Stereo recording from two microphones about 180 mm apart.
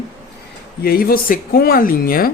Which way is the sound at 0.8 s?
55° left (ahead or behind).